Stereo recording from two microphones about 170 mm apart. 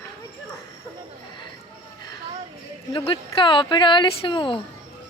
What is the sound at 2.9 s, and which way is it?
Speech, 30° left (ahead or behind).